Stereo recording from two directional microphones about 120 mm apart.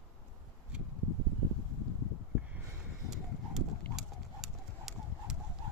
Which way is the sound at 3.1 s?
5° right (ahead or behind).